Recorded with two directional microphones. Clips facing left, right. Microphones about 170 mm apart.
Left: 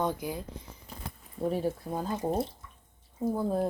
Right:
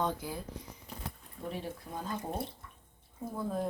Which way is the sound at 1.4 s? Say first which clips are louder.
Left 10 dB; 40° left (ahead or behind).